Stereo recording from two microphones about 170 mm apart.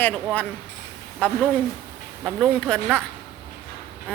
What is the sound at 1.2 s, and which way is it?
Speech, 10° left (ahead or behind).